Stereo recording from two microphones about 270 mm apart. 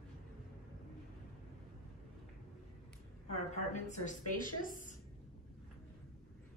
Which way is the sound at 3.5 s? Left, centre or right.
Left.